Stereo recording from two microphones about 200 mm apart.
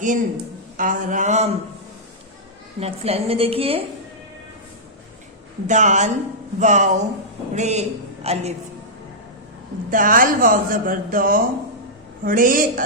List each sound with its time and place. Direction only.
0.0 s a man's voice: 40° right (ahead or behind)
2.8 s a woman's voice: 30° right (ahead or behind)
5.6 s a man's voice: 35° right (ahead or behind)
9.9 s speech: 45° right (ahead or behind)